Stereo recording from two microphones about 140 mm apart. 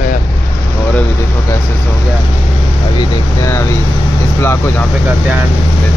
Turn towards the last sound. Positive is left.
turn(degrees=15)  # may be behind; listen again after turning